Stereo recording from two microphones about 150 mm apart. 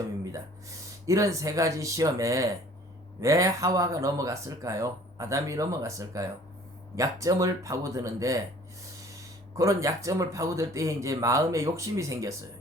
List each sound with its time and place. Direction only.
1.0 s speech: 20° right (ahead or behind)
9.6 s speech: 20° right (ahead or behind)